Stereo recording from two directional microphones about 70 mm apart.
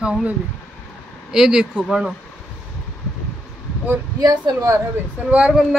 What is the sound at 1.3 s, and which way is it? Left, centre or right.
Speech, centre.